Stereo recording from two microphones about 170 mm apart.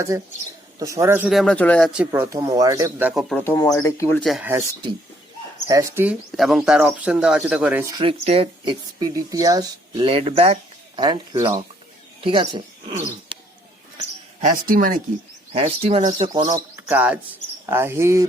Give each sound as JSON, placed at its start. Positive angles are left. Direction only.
{"t": 0.1, "sound": "speech", "side_deg": -20}
{"t": 1.3, "sound": "speech", "side_deg": 0}
{"t": 1.9, "sound": "speech", "side_deg": -10}
{"t": 3.1, "sound": "speech", "side_deg": 0}
{"t": 3.4, "sound": "speech", "side_deg": 15}
{"t": 4.2, "sound": "speech", "side_deg": 0}
{"t": 5.6, "sound": "speech", "side_deg": -15}
{"t": 6.3, "sound": "speech", "side_deg": 0}
{"t": 8.2, "sound": "speech", "side_deg": -35}
{"t": 14.4, "sound": "speech", "side_deg": -55}
{"t": 15.5, "sound": "speech", "side_deg": -35}
{"t": 16.3, "sound": "speech", "side_deg": -20}
{"t": 16.7, "sound": "a sound", "side_deg": -10}
{"t": 17.7, "sound": "speech", "side_deg": -15}